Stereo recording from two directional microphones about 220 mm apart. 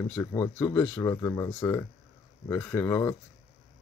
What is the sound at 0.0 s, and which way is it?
Speech, 10° left (ahead or behind).